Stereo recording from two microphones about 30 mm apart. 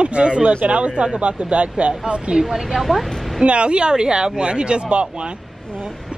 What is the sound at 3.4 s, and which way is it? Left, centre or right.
Speech, right.